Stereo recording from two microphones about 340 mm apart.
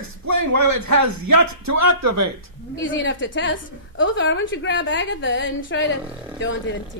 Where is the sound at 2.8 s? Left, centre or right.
Left.